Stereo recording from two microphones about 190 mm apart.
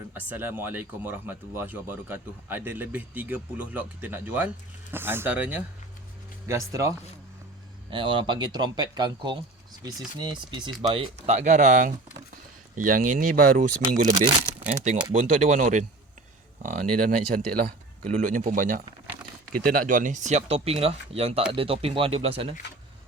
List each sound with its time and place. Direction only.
0.1 s speech: 10° right (ahead or behind)
7.9 s speech: 25° right (ahead or behind); by 14.1 s 45° right (ahead or behind)
15.1 s speech: 40° right (ahead or behind)